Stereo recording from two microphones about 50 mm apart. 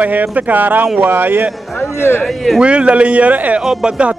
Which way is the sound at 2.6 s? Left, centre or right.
Right.